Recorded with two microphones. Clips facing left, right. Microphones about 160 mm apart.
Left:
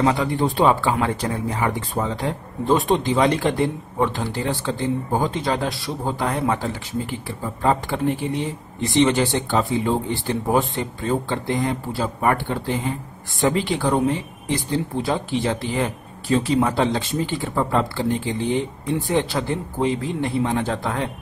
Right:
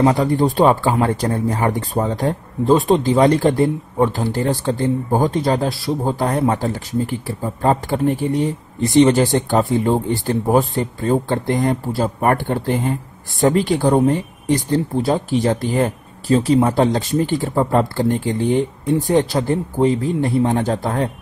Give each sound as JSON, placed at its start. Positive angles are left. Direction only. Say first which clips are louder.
{"t": 0.0, "sound": "speech", "louder": "right 5 dB", "side_deg": -35}